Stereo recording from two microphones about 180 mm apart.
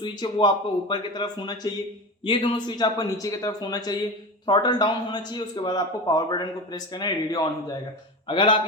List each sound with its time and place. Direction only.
0.0 s a man's voice: 25° left (ahead or behind)